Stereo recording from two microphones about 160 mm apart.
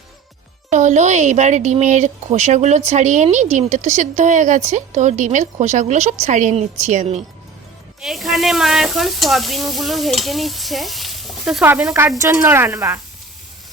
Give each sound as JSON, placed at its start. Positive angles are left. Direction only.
{"t": 0.7, "sound": "speech", "side_deg": -50}
{"t": 8.0, "sound": "speech", "side_deg": 0}